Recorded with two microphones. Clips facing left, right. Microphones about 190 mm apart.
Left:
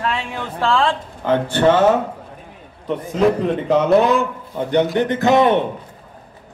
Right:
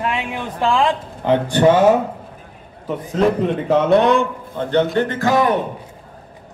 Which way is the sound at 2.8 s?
Centre (ahead or behind).